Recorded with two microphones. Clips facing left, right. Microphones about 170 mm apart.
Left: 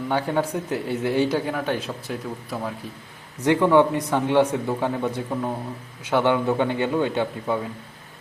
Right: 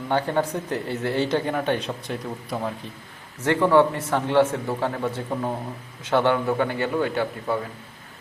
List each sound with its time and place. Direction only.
0.1 s a man's voice: 10° left (ahead or behind)
3.4 s speech: 15° left (ahead or behind)
5.3 s speech: 5° right (ahead or behind)
6.0 s speech: 15° left (ahead or behind)